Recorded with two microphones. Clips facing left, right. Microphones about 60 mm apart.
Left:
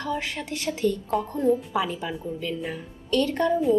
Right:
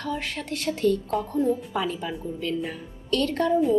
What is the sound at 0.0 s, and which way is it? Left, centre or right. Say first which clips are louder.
Speech: left 1 dB; centre.